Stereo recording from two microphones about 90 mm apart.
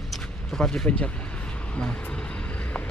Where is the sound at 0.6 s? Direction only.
5° left (ahead or behind).